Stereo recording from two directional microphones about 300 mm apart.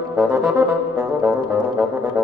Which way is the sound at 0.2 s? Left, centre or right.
Centre.